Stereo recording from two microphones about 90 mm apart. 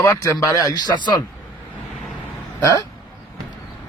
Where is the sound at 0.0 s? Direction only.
40° left (ahead or behind).